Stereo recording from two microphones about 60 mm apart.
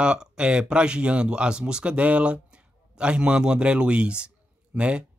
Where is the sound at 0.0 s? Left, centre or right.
Centre.